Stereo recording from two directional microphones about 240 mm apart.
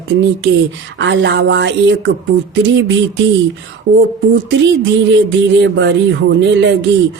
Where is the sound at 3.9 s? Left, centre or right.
Right.